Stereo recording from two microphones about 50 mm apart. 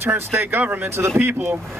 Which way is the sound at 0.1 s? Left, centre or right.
Right.